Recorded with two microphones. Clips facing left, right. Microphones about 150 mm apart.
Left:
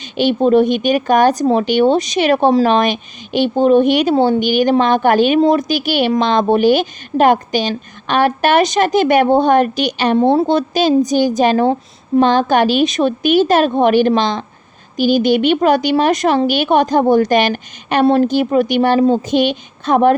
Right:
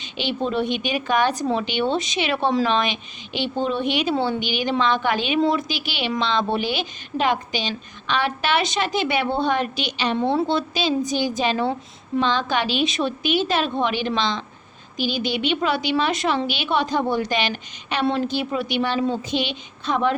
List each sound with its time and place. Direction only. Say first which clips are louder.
0.0 s speech: left 11 dB; 45° left (ahead or behind)